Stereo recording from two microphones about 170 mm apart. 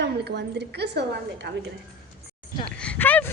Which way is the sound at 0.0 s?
80° right.